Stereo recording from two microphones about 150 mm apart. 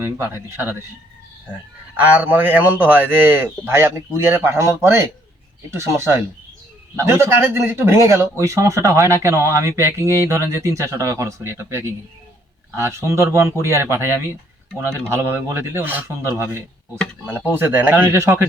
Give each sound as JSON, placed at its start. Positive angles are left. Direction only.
{"t": 0.0, "sound": "a man's voice", "side_deg": -15}
{"t": 2.0, "sound": "a man's voice", "side_deg": -10}
{"t": 14.7, "sound": "speech", "side_deg": 5}
{"t": 15.1, "sound": "a man's voice", "side_deg": -15}